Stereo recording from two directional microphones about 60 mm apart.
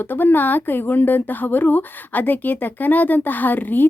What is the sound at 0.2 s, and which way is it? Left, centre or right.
Speech, left.